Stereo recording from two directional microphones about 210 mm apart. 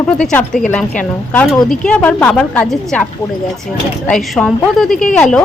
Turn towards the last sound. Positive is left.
turn(degrees=5)  # may be behind; listen again after turning